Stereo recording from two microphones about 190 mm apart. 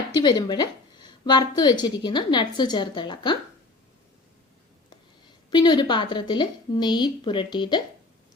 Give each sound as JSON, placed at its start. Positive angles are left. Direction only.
{"t": 0.2, "sound": "a woman's voice", "side_deg": 20}
{"t": 5.5, "sound": "a woman's voice", "side_deg": 25}